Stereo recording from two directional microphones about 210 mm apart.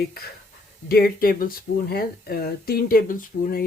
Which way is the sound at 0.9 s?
45° left (ahead or behind).